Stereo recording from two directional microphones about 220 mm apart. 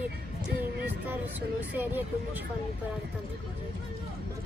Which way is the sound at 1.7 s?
10° right (ahead or behind).